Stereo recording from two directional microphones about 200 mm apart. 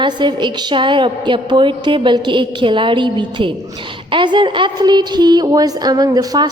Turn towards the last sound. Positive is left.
turn(degrees=-20)  # may be behind; listen again after turning